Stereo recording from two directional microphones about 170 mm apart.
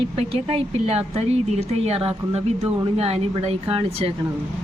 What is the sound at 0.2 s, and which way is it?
A woman's voice, 35° right (ahead or behind).